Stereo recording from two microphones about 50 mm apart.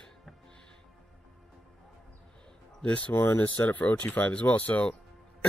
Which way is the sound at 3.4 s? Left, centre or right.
Left.